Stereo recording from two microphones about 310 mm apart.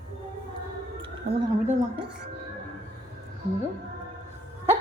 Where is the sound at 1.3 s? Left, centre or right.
Right.